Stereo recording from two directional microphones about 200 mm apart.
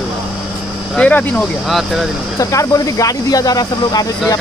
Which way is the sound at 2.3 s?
15° left (ahead or behind).